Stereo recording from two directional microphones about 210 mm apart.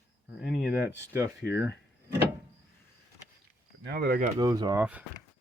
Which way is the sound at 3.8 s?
50° right (ahead or behind).